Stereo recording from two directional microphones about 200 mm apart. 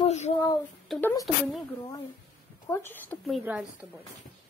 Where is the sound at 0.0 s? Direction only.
35° left (ahead or behind).